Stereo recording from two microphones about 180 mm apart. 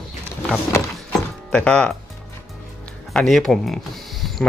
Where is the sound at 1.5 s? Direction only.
5° left (ahead or behind).